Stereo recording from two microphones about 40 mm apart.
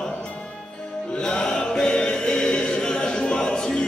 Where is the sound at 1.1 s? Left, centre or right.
Centre.